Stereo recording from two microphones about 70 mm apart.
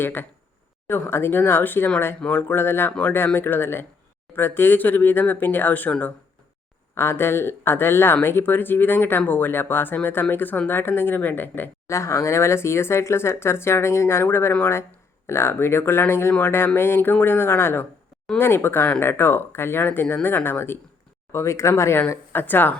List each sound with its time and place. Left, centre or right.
0.0 s speech: left
6.9 s speech: left
11.9 s speech: left
21.3 s speech: left
22.3 s speech: left